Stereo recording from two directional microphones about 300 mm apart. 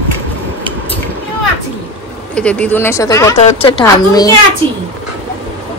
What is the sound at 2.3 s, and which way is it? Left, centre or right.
Speech, centre.